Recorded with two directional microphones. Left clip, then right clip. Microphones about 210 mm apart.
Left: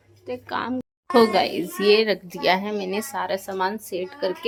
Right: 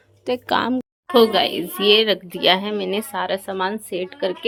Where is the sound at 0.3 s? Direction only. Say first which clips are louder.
Right 8 dB; 40° right (ahead or behind).